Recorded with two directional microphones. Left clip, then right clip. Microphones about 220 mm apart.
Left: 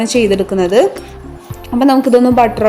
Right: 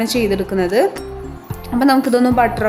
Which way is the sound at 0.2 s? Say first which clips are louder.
Left 7 dB; 5° left (ahead or behind).